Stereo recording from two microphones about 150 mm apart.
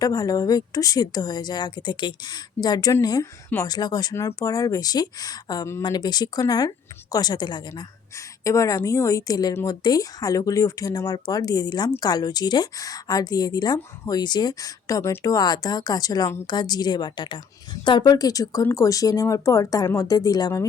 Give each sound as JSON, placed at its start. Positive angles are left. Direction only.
{"t": 0.0, "sound": "a woman's voice", "side_deg": 25}